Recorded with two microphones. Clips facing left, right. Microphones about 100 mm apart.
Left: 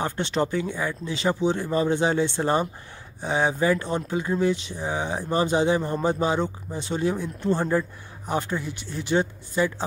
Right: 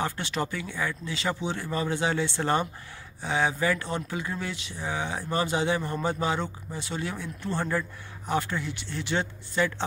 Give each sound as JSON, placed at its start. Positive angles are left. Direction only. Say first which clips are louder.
{"t": 0.0, "sound": "speech", "louder": "left 5 dB", "side_deg": 25}